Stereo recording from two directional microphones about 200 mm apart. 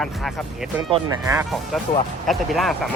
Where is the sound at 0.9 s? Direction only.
15° right (ahead or behind).